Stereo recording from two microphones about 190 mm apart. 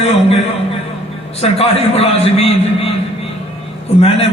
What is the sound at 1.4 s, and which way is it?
A man's voice, 30° left (ahead or behind).